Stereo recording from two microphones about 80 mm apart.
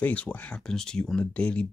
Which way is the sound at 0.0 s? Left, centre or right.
Centre.